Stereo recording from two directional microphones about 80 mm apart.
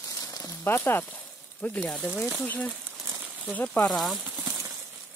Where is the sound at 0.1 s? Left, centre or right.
Left.